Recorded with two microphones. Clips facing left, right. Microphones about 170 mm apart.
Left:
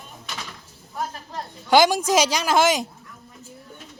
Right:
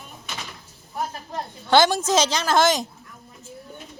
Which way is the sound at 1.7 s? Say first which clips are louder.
Left 1 dB; 10° left (ahead or behind).